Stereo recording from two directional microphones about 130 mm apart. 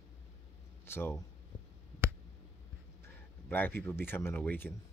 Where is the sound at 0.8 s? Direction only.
20° left (ahead or behind).